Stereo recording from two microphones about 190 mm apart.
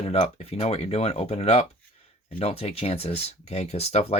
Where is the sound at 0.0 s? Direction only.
35° left (ahead or behind).